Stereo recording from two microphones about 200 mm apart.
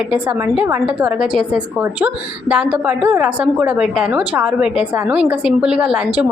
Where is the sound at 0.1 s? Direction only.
5° right (ahead or behind).